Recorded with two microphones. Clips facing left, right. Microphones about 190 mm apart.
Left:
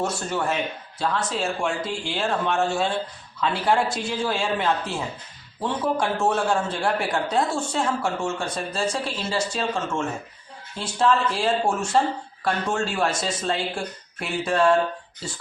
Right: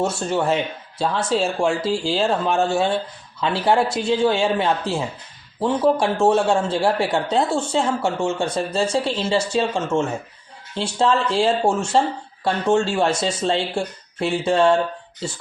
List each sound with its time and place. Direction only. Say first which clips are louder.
0.0 s a man's voice: right 5 dB; 25° right (ahead or behind)